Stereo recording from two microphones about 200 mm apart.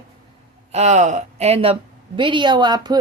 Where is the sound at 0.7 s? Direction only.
35° right (ahead or behind).